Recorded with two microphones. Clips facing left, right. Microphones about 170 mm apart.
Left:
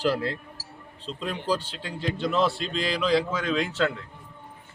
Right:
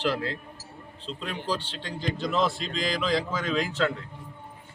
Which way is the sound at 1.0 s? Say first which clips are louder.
Left 3 dB; centre (ahead or behind).